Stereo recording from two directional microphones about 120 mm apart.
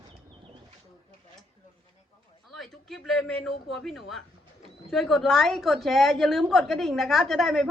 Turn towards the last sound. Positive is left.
turn(degrees=0)  # may be behind; listen again after turning